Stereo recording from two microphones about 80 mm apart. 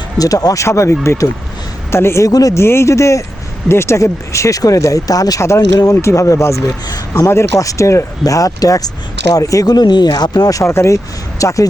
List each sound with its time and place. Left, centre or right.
0.2 s speech: left
2.3 s speech: left
2.6 s speech: left